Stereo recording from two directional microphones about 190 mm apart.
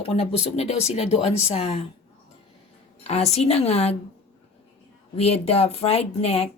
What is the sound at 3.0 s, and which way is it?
Speech, 35° left (ahead or behind).